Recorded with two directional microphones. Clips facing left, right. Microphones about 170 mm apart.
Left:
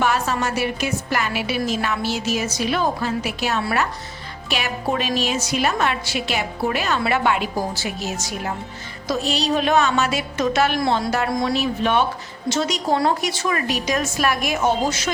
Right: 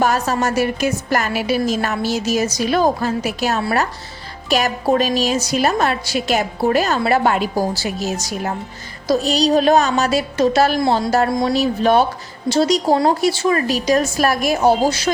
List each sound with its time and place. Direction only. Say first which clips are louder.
0.0 s a woman's voice: right 4 dB; 40° right (ahead or behind)
11.3 s speech: right 4 dB; 25° right (ahead or behind)
11.5 s a woman's voice: right 7 dB; 35° right (ahead or behind)